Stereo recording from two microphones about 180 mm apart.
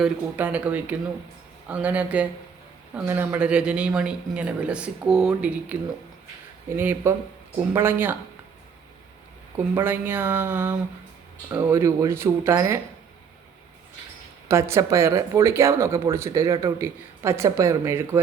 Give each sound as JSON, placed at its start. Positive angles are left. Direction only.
{"t": 0.0, "sound": "speech", "side_deg": -10}
{"t": 9.7, "sound": "speech", "side_deg": -10}
{"t": 14.4, "sound": "speech", "side_deg": -15}